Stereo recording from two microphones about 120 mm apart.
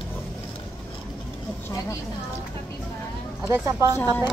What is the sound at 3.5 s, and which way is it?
Speech, 25° right (ahead or behind).